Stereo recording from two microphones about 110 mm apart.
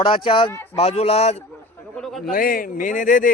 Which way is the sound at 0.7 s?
70° left (ahead or behind).